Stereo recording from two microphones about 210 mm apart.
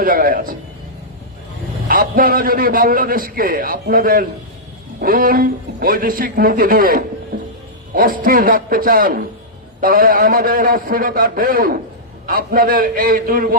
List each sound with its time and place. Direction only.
0.0 s a man's voice: 40° right (ahead or behind)
1.9 s a man's voice: 40° right (ahead or behind)